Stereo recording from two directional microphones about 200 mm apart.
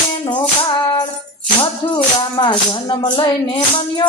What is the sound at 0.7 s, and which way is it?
Female singing, 20° left (ahead or behind).